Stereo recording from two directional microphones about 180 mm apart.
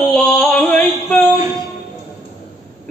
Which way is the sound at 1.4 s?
20° right (ahead or behind).